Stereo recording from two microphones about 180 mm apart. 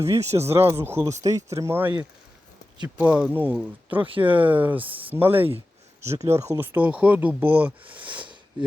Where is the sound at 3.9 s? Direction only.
30° right (ahead or behind).